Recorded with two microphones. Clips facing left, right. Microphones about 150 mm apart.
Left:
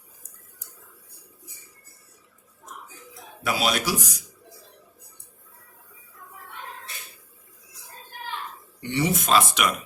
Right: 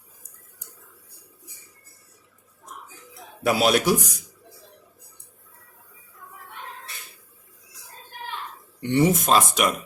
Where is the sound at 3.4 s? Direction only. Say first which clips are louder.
Right 6 dB; 55° right (ahead or behind).